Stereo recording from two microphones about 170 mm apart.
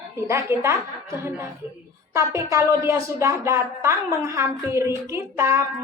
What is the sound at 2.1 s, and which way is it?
Speech, 15° right (ahead or behind).